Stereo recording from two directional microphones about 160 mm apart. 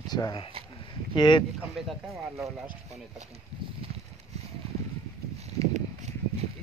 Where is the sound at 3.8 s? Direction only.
35° right (ahead or behind).